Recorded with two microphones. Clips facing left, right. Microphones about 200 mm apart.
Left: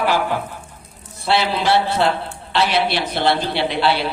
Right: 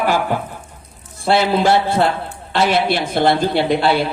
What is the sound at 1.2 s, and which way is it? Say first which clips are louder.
A man's voice: right 4 dB; 45° right (ahead or behind).